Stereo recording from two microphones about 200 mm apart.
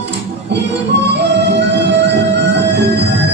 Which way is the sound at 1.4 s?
60° right (ahead or behind).